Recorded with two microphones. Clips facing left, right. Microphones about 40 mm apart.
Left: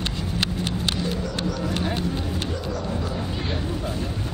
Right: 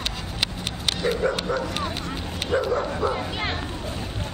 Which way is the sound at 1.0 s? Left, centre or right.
Right.